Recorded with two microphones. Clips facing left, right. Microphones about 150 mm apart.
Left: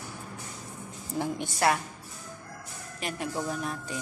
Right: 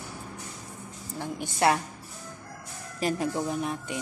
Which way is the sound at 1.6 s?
25° right (ahead or behind).